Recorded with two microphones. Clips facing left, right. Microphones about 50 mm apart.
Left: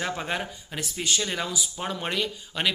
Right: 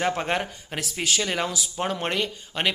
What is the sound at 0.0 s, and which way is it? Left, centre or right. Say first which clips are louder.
Speech: right 4 dB; right.